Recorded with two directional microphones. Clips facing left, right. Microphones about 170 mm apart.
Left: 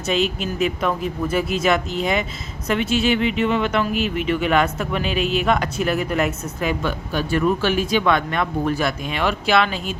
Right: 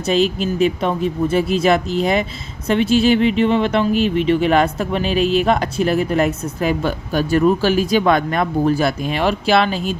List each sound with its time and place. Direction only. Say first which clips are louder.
0.0 s speech: right 5 dB; 35° right (ahead or behind)